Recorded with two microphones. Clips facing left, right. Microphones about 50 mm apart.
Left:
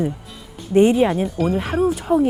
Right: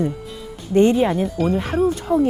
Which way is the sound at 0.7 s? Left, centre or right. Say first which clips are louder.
Left 1 dB; centre.